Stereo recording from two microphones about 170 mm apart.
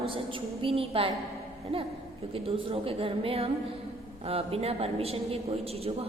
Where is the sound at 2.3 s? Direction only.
35° right (ahead or behind).